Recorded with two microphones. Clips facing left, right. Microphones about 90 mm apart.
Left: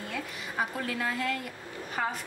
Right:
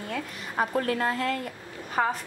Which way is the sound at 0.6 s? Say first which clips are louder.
Right 6 dB; 45° right (ahead or behind).